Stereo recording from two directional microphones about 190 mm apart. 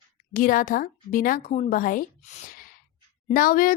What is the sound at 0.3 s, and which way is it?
A woman's voice, 45° left (ahead or behind).